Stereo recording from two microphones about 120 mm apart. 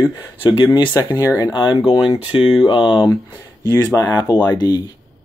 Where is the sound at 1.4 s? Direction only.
35° left (ahead or behind).